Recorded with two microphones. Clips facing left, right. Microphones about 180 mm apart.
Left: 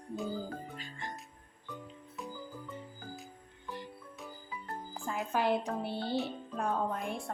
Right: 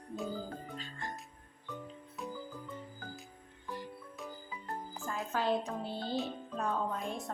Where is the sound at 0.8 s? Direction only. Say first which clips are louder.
Even; 10° left (ahead or behind).